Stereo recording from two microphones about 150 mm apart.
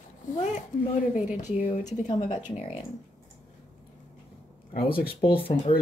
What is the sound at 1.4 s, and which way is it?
Speech, 60° left (ahead or behind).